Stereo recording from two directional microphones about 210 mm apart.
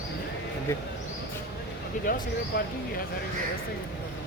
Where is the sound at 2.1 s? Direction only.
40° left (ahead or behind).